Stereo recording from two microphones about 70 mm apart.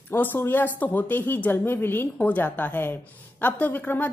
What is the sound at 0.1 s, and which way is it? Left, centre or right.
Speech, left.